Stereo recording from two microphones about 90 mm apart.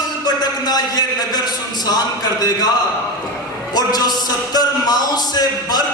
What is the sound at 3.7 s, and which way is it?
A man's voice, 50° left (ahead or behind).